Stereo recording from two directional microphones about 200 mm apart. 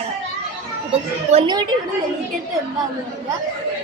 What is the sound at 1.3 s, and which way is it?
Speech, 25° right (ahead or behind).